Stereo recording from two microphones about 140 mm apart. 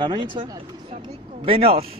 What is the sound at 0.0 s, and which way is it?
A man's voice, 35° right (ahead or behind).